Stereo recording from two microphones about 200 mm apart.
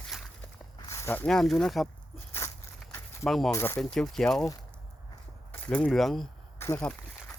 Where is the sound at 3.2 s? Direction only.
Centre (ahead or behind).